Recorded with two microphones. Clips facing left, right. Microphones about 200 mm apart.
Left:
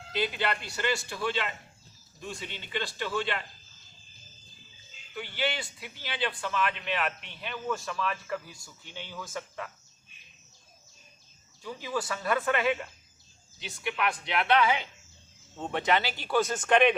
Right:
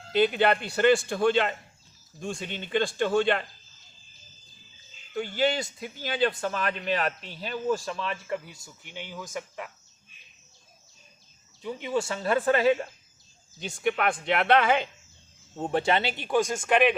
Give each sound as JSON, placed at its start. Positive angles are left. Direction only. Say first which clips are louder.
{"t": 0.1, "sound": "speech", "louder": "right 8 dB", "side_deg": -55}
{"t": 5.1, "sound": "a man's voice", "louder": "right 7 dB", "side_deg": -45}
{"t": 11.6, "sound": "speech", "louder": "right 5 dB", "side_deg": -20}
{"t": 13.6, "sound": "speech", "louder": "right 5 dB", "side_deg": -50}
{"t": 15.5, "sound": "speech", "louder": "right 3 dB", "side_deg": -35}